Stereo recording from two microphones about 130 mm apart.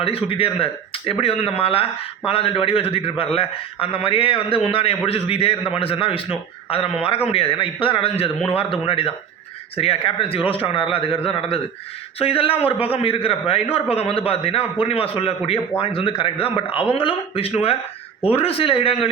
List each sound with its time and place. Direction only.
0.0 s a man's voice: 45° left (ahead or behind)